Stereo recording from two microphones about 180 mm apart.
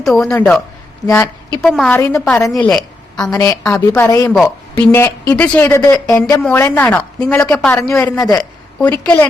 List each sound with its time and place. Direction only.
0.0 s speech: centre (ahead or behind)
1.0 s speech: 15° left (ahead or behind)
1.6 s speech: centre (ahead or behind)
2.0 s a woman's voice: 15° left (ahead or behind)
3.3 s speech: 20° left (ahead or behind)
8.8 s speech: 5° left (ahead or behind)